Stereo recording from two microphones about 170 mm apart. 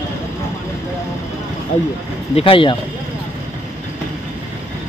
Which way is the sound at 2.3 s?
30° left (ahead or behind).